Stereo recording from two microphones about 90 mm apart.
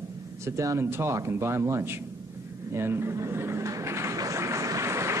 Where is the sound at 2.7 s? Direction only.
30° right (ahead or behind).